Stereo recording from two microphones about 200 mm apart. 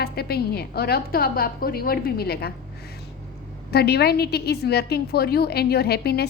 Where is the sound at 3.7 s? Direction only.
55° left (ahead or behind).